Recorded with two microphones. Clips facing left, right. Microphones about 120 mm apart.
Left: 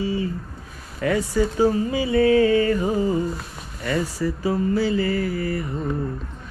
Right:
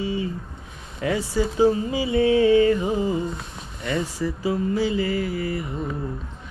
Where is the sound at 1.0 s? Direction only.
45° left (ahead or behind).